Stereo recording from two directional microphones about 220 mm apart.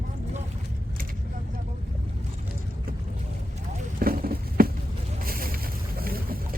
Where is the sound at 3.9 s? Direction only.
40° right (ahead or behind).